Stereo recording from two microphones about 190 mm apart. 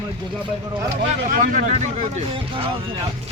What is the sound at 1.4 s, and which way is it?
Speech, 40° right (ahead or behind).